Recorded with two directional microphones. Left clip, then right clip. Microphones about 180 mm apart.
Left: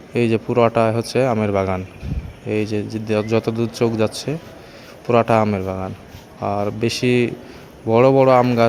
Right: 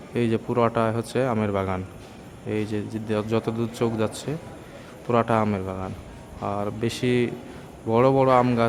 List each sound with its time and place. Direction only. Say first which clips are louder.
0.1 s a man's voice: left 6 dB; 20° left (ahead or behind)